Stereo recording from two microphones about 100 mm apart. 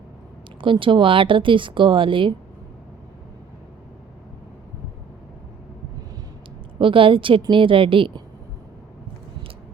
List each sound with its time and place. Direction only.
0.6 s speech: 55° right (ahead or behind)
6.7 s speech: 60° right (ahead or behind)